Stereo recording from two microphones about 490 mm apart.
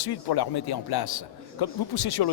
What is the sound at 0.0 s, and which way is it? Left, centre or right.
A man's voice, left.